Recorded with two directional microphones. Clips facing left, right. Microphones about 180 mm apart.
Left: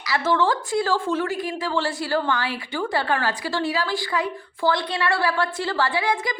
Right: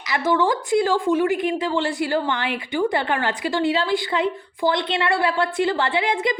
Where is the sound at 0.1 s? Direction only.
15° right (ahead or behind).